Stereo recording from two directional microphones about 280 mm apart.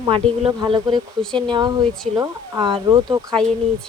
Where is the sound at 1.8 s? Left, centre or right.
Centre.